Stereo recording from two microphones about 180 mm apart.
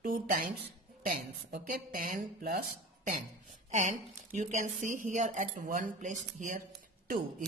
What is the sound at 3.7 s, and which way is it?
Speech, 45° right (ahead or behind).